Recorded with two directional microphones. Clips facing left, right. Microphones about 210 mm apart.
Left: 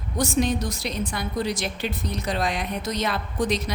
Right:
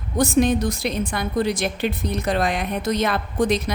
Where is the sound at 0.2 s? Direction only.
55° right (ahead or behind).